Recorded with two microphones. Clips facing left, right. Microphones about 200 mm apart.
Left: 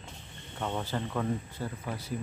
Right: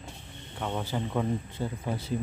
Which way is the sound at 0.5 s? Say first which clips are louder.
Right 1 dB; 5° right (ahead or behind).